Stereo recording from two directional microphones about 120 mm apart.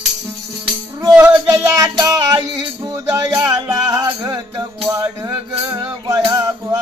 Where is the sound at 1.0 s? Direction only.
20° right (ahead or behind).